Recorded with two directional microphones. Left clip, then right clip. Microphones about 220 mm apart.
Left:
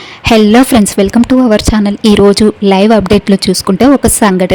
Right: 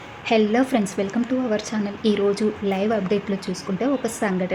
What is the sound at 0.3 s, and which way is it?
A woman's voice, 50° left (ahead or behind).